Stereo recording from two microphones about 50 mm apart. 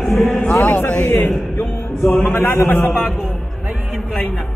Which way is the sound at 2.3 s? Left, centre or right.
Left.